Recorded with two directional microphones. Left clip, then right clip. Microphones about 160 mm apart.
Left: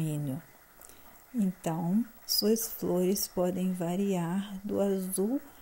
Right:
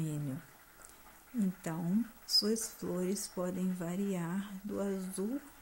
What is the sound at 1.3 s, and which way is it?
Speech, 25° left (ahead or behind).